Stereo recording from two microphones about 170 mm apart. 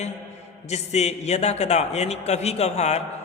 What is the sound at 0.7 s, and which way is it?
A man's voice, 40° left (ahead or behind).